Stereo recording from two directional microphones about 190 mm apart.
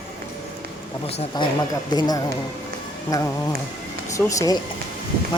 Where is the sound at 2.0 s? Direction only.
20° left (ahead or behind).